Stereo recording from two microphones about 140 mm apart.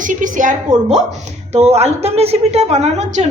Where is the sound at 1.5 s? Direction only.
50° right (ahead or behind).